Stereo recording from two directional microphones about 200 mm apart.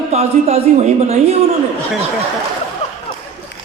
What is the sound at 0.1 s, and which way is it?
A man's voice, 30° right (ahead or behind).